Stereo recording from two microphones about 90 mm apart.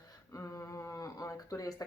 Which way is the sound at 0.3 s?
30° left (ahead or behind).